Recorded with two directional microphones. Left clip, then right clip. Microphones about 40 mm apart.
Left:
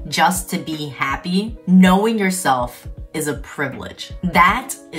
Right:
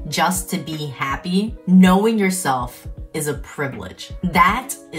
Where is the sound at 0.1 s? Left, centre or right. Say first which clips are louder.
Left 3 dB; left.